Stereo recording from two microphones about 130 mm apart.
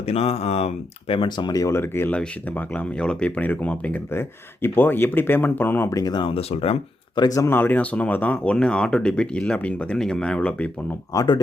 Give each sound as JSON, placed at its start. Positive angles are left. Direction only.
{"t": 0.0, "sound": "speech", "side_deg": 50}
{"t": 7.2, "sound": "speech", "side_deg": 25}
{"t": 11.1, "sound": "speech", "side_deg": 25}